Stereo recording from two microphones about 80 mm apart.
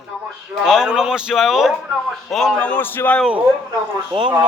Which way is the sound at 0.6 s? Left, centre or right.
Centre.